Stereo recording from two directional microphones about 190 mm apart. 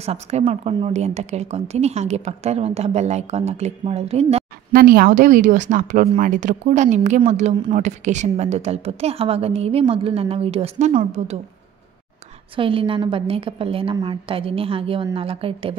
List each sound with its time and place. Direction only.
0.0 s a woman's voice: 35° right (ahead or behind)
4.7 s a woman's voice: 50° right (ahead or behind); by 11.3 s 35° right (ahead or behind)
12.5 s a woman's voice: 25° right (ahead or behind)